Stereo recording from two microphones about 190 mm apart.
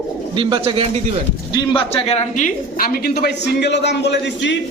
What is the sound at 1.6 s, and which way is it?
Speech, 30° left (ahead or behind).